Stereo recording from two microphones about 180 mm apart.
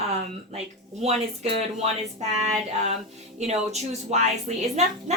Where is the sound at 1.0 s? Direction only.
35° right (ahead or behind).